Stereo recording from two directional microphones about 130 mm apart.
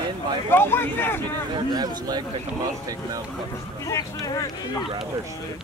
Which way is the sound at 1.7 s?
30° right (ahead or behind).